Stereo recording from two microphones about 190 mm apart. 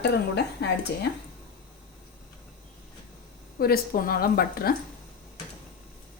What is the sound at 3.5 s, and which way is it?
Speech, 50° left (ahead or behind).